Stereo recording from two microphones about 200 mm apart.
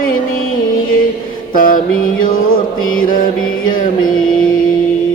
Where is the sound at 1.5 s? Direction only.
45° left (ahead or behind).